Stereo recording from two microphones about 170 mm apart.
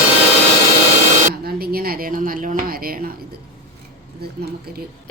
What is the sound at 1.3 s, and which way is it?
A woman's voice, 65° right (ahead or behind).